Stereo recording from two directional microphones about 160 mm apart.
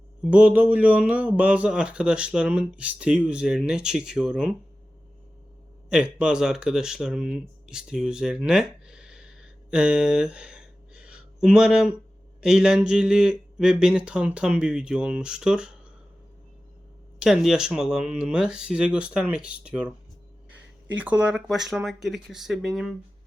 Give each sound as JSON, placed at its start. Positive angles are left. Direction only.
{"t": 0.2, "sound": "speech", "side_deg": -10}
{"t": 5.9, "sound": "speech", "side_deg": -5}
{"t": 17.2, "sound": "speech", "side_deg": 0}